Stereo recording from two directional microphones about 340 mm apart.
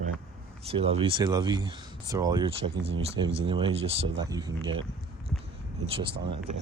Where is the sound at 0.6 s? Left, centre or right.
Centre.